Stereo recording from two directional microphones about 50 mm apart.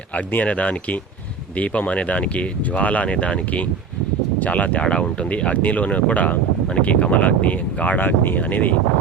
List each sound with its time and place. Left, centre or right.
0.4 s speech: left